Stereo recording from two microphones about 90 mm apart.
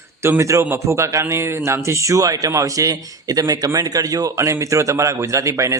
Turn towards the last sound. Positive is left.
turn(degrees=-35)  # may be behind; listen again after turning